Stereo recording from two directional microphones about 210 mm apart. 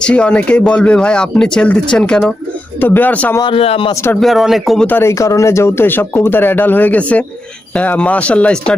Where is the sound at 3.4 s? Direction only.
25° left (ahead or behind).